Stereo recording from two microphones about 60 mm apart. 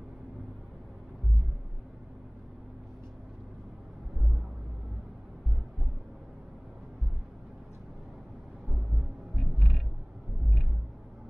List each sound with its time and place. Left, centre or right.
9.3 s frog: left